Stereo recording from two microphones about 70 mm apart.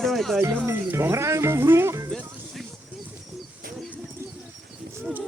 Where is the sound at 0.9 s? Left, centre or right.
Right.